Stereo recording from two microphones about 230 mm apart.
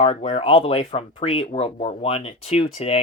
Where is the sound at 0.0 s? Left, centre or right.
Left.